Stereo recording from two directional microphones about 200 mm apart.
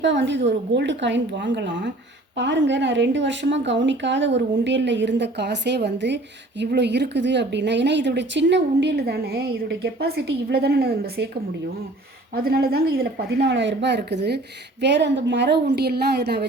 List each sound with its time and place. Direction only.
0.0 s speech: 65° right (ahead or behind)
12.3 s speech: 50° right (ahead or behind)